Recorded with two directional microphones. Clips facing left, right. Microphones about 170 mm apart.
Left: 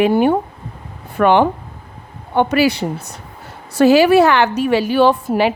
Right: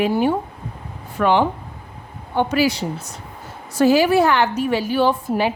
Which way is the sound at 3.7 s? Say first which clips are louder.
Left 5 dB; 75° left (ahead or behind).